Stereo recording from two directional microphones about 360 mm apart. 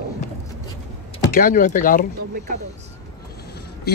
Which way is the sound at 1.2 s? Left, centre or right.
Left.